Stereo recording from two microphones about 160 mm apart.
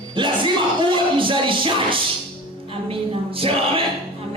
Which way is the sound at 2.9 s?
35° right (ahead or behind).